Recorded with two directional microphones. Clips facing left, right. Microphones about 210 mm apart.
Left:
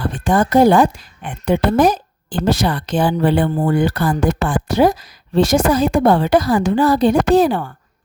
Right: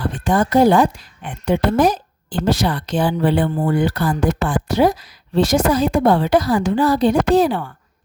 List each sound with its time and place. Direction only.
0.3 s a woman's voice: 50° left (ahead or behind)